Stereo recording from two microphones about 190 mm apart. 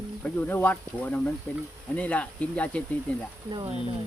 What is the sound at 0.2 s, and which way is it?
Speech, 10° left (ahead or behind).